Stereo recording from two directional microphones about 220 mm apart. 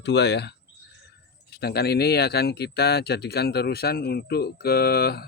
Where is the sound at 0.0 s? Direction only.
50° left (ahead or behind).